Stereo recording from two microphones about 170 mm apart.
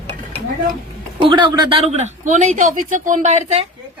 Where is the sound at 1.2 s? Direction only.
30° right (ahead or behind).